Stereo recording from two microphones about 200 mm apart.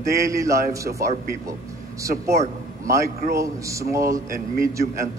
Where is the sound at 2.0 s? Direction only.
15° right (ahead or behind).